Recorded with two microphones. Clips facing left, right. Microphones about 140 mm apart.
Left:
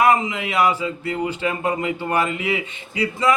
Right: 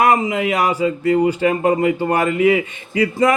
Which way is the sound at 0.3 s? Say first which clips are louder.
Right 2 dB; 45° right (ahead or behind).